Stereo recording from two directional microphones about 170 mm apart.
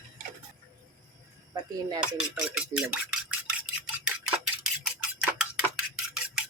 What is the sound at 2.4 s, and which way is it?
Speech, 5° right (ahead or behind).